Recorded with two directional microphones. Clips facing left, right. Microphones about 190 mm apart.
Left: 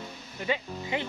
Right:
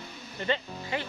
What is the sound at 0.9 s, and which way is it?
Speech, 20° left (ahead or behind).